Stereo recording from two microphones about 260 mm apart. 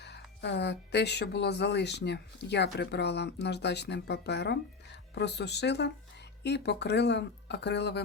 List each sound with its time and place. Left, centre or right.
0.0 s speech: left